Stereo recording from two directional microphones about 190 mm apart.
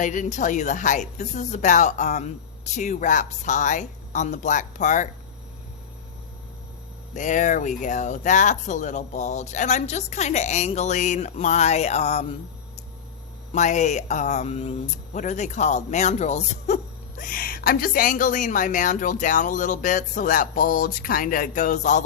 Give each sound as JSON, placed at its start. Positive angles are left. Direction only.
{"t": 0.0, "sound": "speech", "side_deg": 40}
{"t": 7.1, "sound": "speech", "side_deg": 40}